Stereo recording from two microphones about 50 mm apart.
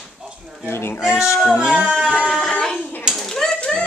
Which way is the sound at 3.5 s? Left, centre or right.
Left.